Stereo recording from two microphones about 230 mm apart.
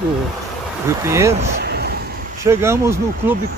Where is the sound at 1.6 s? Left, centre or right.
Right.